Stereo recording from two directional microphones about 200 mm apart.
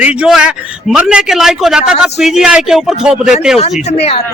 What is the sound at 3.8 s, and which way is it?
Speech, 30° left (ahead or behind).